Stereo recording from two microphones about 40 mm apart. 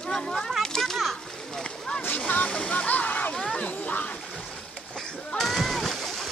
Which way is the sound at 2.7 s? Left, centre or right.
Left.